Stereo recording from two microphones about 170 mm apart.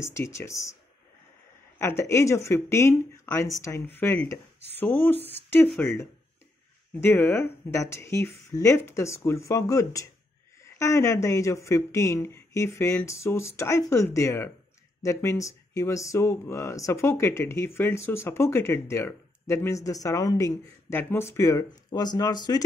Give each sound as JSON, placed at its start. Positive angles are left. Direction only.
{"t": 0.0, "sound": "speech", "side_deg": 15}
{"t": 1.8, "sound": "speech", "side_deg": 15}